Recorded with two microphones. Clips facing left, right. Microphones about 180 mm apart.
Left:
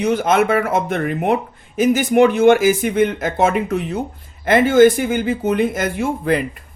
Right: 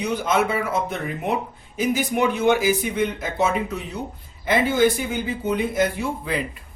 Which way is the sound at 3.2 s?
90° left.